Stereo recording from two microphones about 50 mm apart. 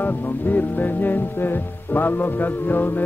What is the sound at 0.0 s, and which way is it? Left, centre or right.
Speech, left.